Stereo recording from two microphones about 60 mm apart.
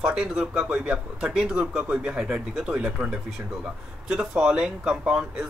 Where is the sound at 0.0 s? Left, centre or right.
Centre.